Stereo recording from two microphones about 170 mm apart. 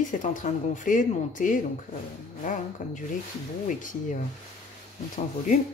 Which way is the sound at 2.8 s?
50° left (ahead or behind).